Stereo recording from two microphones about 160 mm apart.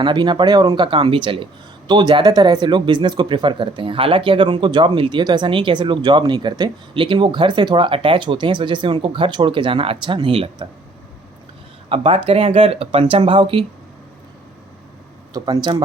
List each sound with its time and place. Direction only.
0.0 s speech: 30° right (ahead or behind)
11.9 s speech: 35° right (ahead or behind)
15.3 s speech: 25° right (ahead or behind)